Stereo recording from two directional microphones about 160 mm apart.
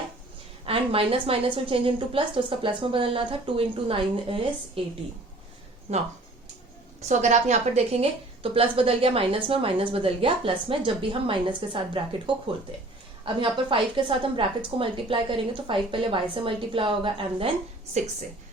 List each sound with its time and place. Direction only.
0.6 s a woman's voice: 35° right (ahead or behind)
7.0 s a woman's voice: 45° right (ahead or behind); by 17.5 s 30° right (ahead or behind)